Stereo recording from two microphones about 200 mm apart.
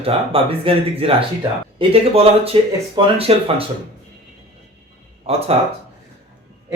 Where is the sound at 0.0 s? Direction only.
30° right (ahead or behind).